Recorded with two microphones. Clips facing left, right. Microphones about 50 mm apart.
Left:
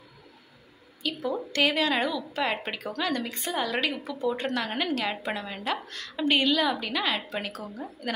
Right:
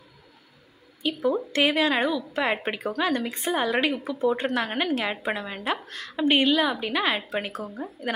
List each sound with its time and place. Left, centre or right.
1.0 s a woman's voice: centre
3.3 s a woman's voice: right